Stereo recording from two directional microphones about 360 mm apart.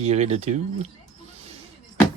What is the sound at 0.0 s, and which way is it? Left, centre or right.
Speech, centre.